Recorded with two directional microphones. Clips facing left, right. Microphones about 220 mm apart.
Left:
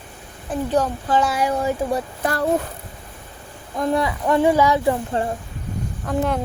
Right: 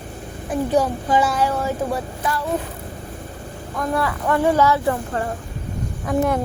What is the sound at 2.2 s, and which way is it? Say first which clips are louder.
Speech: left 4 dB; 50° left (ahead or behind).